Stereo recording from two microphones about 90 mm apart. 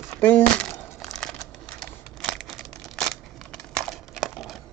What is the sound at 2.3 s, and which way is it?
Crumpling, centre (ahead or behind).